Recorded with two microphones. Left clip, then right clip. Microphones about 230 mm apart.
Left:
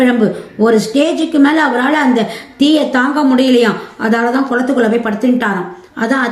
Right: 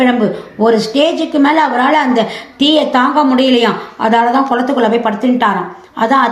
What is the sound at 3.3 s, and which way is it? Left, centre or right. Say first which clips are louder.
Speech: even; centre.